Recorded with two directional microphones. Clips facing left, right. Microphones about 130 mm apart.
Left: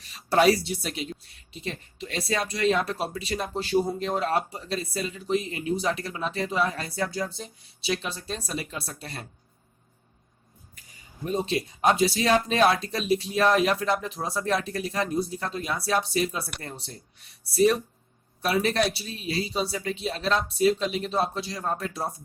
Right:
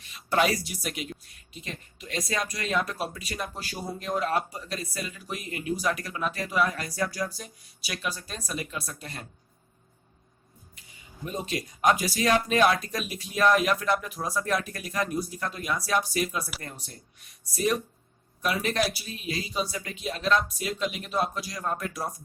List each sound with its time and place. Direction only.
0.0 s speech: 35° left (ahead or behind)
11.3 s speech: 30° left (ahead or behind)